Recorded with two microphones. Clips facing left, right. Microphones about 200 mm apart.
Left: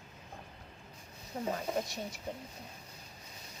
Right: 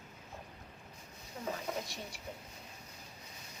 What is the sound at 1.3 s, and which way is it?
Speech, 40° left (ahead or behind).